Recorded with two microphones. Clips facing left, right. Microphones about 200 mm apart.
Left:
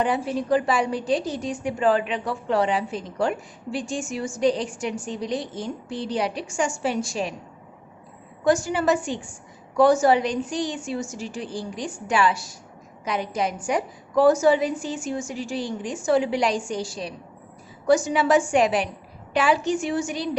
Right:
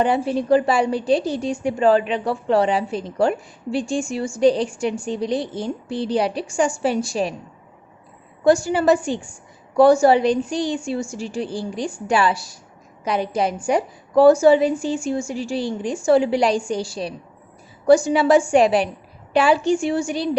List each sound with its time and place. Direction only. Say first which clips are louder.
0.0 s a woman's voice: right 4 dB; 30° right (ahead or behind)
8.4 s a woman's voice: right 5 dB; 30° right (ahead or behind)